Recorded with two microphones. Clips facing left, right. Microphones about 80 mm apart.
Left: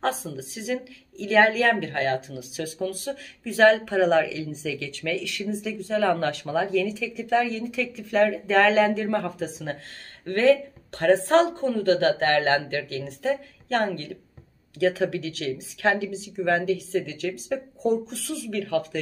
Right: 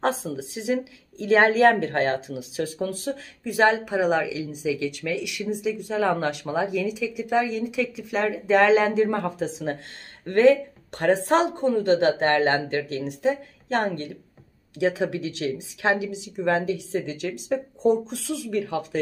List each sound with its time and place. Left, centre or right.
0.0 s a woman's voice: right
3.4 s a woman's voice: centre